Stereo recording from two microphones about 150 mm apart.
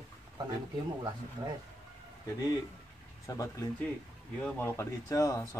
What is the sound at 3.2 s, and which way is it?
Speech, 20° left (ahead or behind).